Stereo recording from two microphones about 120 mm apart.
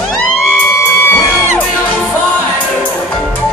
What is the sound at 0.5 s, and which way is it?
Music, 15° left (ahead or behind).